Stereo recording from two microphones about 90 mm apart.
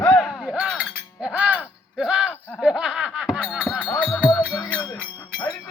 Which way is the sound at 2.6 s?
10° right (ahead or behind).